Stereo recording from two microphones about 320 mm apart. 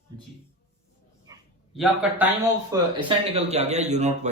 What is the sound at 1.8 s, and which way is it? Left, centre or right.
A man's voice, centre.